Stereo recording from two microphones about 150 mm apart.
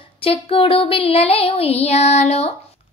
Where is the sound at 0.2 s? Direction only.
40° left (ahead or behind).